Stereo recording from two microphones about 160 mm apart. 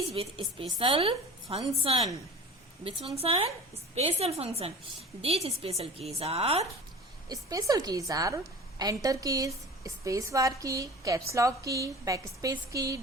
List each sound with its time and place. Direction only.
0.1 s a woman's voice: 35° right (ahead or behind)
3.2 s a woman's voice: 35° right (ahead or behind)
7.3 s a woman's voice: 20° right (ahead or behind)